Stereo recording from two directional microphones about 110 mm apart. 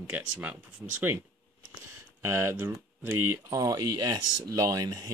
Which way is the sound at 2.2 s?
25° right (ahead or behind).